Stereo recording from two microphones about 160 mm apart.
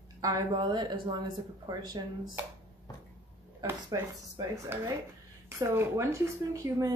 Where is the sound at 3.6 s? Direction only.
25° right (ahead or behind).